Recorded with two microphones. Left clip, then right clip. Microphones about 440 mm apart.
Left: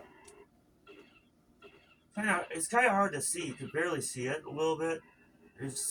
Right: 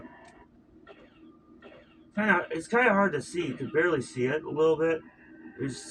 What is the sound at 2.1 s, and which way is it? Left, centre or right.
Speech, left.